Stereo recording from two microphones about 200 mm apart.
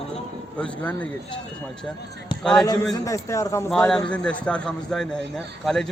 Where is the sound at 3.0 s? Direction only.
15° left (ahead or behind).